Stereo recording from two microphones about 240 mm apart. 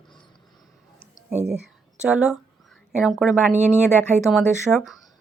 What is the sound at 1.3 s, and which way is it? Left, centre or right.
Speech, centre.